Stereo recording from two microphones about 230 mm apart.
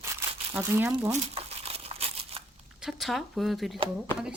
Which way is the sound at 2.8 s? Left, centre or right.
Centre.